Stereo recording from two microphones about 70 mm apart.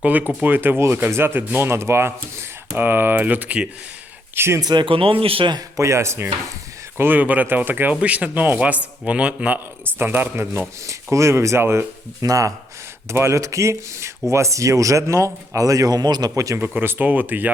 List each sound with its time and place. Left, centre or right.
0.0 s speech: right
4.4 s speech: right
4.6 s speech: right
5.7 s speech: right
6.9 s speech: right
9.8 s speech: right
10.8 s speech: right
12.2 s speech: right
13.1 s speech: right
16.3 s speech: right
16.7 s speech: right